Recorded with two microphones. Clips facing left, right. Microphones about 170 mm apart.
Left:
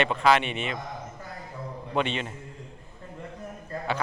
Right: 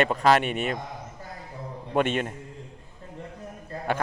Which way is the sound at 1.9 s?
50° right (ahead or behind).